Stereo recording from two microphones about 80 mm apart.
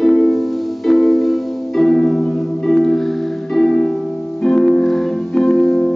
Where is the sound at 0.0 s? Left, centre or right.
Centre.